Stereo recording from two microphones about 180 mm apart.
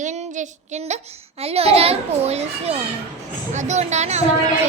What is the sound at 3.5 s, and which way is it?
Speech, 40° right (ahead or behind).